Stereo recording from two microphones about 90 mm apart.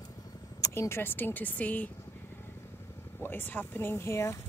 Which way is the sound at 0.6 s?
30° left (ahead or behind).